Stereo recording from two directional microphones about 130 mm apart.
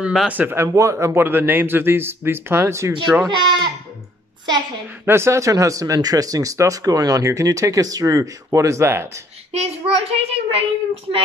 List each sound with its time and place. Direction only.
0.0 s a man's voice: 5° right (ahead or behind)
2.9 s a man's voice: 10° right (ahead or behind)
3.3 s speech: 35° right (ahead or behind)
5.0 s speech: 20° right (ahead or behind)
9.5 s a child's voice: 55° right (ahead or behind)